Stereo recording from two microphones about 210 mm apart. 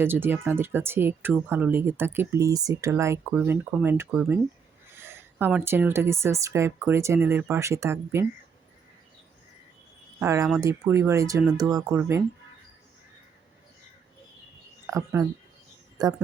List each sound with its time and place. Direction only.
0.0 s speech: 10° right (ahead or behind)
10.2 s speech: 10° right (ahead or behind)
14.8 s speech: 15° right (ahead or behind)